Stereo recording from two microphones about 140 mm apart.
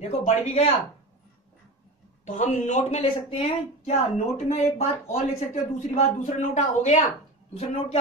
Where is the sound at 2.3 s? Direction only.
60° left (ahead or behind).